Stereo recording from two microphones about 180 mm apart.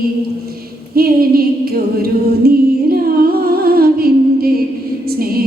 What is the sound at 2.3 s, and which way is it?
Music, 60° right (ahead or behind).